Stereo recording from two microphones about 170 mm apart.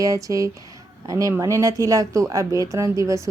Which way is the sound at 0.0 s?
20° right (ahead or behind).